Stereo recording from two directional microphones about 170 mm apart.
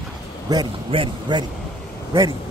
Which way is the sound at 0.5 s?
25° right (ahead or behind).